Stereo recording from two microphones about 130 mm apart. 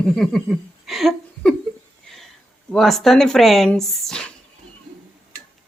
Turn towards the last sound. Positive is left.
turn(degrees=5)  # may be behind; listen again after turning